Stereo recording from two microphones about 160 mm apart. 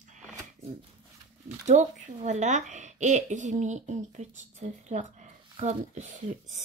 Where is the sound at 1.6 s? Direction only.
50° right (ahead or behind).